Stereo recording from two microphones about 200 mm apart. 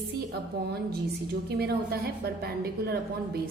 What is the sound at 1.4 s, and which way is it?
A woman's voice, 50° right (ahead or behind).